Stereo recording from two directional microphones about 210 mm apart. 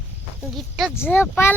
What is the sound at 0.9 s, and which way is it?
Child singing, 10° left (ahead or behind).